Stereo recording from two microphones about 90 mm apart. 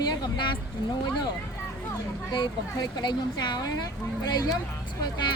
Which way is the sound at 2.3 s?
55° left (ahead or behind).